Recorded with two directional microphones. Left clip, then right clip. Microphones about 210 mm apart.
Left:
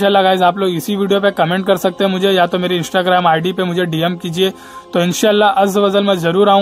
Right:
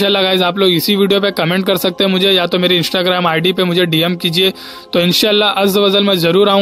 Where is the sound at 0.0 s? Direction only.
50° right (ahead or behind).